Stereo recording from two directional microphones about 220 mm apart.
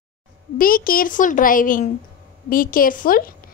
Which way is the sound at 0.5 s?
40° left (ahead or behind).